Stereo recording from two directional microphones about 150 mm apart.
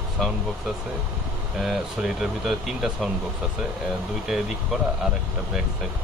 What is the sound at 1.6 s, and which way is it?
Speech, centre (ahead or behind).